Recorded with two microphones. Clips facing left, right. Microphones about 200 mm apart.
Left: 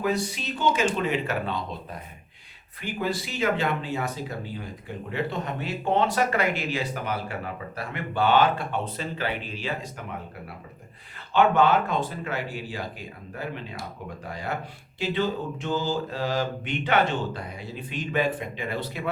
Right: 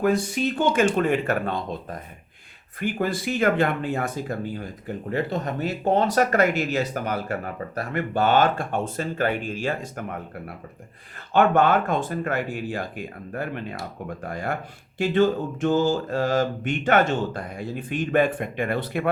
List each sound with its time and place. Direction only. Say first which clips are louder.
0.0 s speech: right 5 dB; 50° right (ahead or behind)
11.3 s speech: right 2 dB; 50° right (ahead or behind)